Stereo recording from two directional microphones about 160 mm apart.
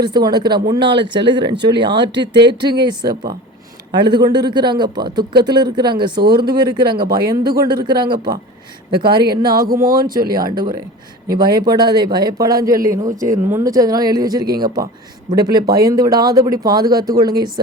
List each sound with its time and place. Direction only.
0.0 s speech: 25° right (ahead or behind)